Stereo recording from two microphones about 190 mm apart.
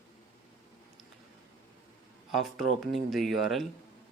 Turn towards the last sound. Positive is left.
turn(degrees=0)  # may be behind; listen again after turning